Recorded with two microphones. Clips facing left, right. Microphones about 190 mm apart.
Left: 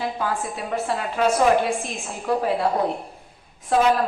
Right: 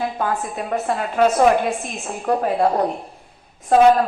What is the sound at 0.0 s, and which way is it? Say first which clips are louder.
A woman's voice: right 3 dB; 50° right (ahead or behind).